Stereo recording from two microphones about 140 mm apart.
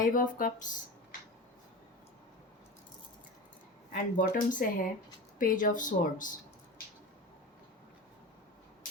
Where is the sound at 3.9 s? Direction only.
80° left.